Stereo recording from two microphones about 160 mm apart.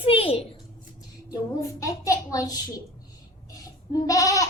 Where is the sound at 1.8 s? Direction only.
20° left (ahead or behind).